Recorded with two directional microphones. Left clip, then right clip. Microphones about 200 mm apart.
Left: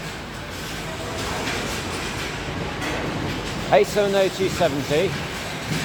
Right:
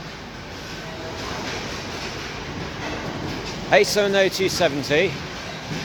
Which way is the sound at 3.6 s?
20° right (ahead or behind).